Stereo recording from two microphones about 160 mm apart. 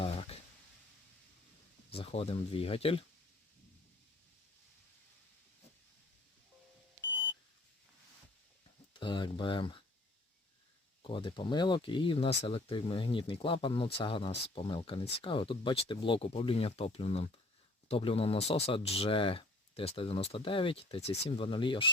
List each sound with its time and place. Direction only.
0.0 s a sound: 40° left (ahead or behind)
1.9 s speech: 40° left (ahead or behind)
8.9 s speech: 30° left (ahead or behind)
11.0 s speech: 30° left (ahead or behind)